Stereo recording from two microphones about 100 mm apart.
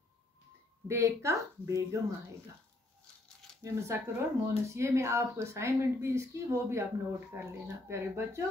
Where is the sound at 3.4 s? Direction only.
Centre (ahead or behind).